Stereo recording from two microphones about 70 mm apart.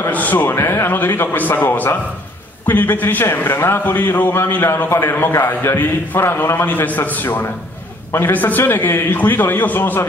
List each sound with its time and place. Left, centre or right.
0.1 s a man's voice: left